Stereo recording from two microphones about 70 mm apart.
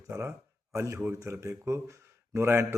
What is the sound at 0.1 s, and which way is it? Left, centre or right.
Speech, right.